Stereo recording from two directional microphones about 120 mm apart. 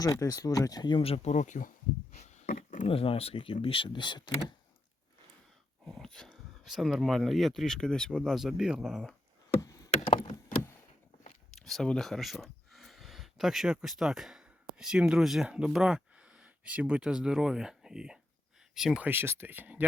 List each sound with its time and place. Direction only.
0.0 s speech: 30° left (ahead or behind); by 1.6 s 85° left
2.1 s a sound: 75° left (ahead or behind); by 2.9 s 90° left
2.9 s speech: 50° left (ahead or behind)
5.8 s speech: 5° left (ahead or behind)
9.6 s chop: 25° left (ahead or behind)
11.5 s speech: 5° left (ahead or behind)
19.0 s speech: 20° right (ahead or behind)